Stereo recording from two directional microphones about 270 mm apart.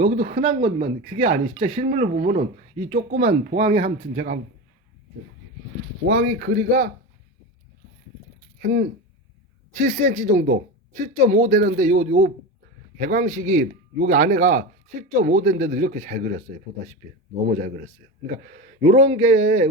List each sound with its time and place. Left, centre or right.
0.0 s speech: right
6.1 s speech: right
8.5 s speech: right
18.3 s speech: right